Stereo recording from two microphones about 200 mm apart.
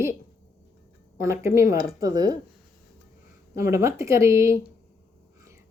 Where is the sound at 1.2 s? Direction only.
15° right (ahead or behind).